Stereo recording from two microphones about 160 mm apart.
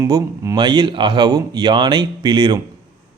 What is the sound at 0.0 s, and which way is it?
A man's voice, 20° right (ahead or behind).